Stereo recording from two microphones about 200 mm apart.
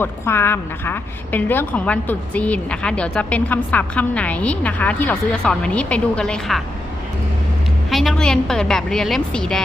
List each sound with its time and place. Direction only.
0.0 s a woman's voice: 10° left (ahead or behind)
7.9 s a woman's voice: centre (ahead or behind)